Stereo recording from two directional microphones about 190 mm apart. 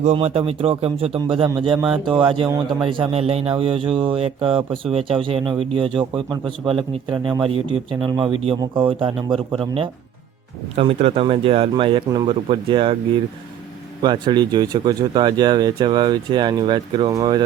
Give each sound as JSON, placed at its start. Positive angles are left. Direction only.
{"t": 0.0, "sound": "speech", "side_deg": -35}
{"t": 2.5, "sound": "a man's voice", "side_deg": -15}
{"t": 2.8, "sound": "speech", "side_deg": -30}
{"t": 14.0, "sound": "speech", "side_deg": -25}